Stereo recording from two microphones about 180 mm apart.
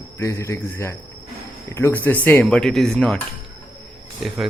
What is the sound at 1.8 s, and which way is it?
Speech, 10° left (ahead or behind).